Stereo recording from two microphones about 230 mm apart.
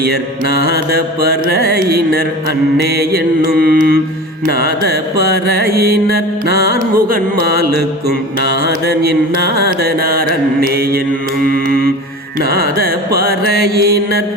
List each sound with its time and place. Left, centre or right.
0.9 s music: right
3.0 s mantra: right
4.4 s music: right
9.8 s mantra: right
12.5 s music: right